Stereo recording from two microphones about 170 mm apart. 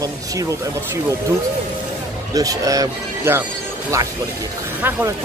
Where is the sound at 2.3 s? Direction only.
20° right (ahead or behind).